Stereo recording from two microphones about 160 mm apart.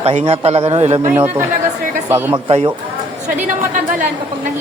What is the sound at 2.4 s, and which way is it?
Speech, 35° right (ahead or behind).